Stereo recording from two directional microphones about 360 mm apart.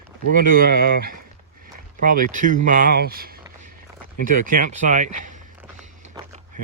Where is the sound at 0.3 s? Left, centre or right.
Right.